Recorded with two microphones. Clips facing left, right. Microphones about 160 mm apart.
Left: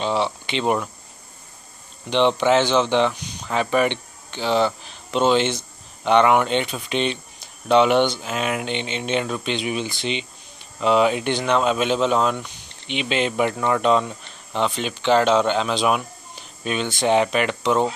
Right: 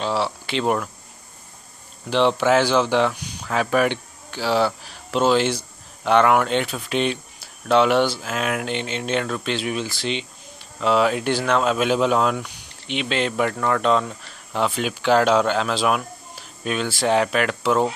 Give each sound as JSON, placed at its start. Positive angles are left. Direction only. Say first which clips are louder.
{"t": 0.0, "sound": "speech", "louder": "left 1 dB", "side_deg": 0}
{"t": 2.0, "sound": "speech", "louder": "even", "side_deg": -5}